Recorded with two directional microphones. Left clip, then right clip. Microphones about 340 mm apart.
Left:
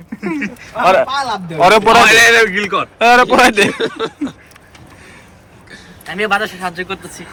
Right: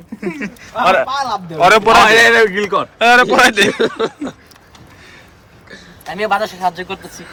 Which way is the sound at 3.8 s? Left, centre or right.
Right.